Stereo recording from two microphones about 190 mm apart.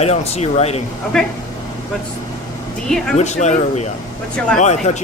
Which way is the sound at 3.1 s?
35° left (ahead or behind).